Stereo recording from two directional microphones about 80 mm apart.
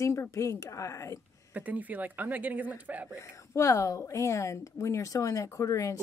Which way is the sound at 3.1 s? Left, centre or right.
Left.